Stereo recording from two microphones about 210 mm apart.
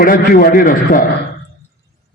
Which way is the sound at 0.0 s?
45° left (ahead or behind).